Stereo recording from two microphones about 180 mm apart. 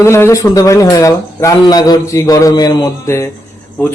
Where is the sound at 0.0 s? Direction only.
15° left (ahead or behind).